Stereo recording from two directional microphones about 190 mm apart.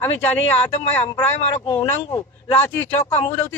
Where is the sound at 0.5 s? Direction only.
35° left (ahead or behind).